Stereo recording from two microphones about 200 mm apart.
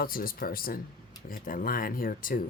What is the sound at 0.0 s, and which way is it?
Speech, 45° left (ahead or behind).